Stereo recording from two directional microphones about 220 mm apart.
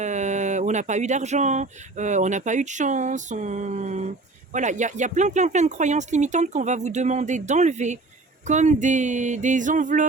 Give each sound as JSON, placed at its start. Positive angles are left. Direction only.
{"t": 0.0, "sound": "speech", "side_deg": -35}